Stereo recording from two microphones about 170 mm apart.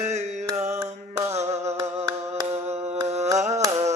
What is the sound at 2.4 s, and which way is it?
Singing, 15° right (ahead or behind).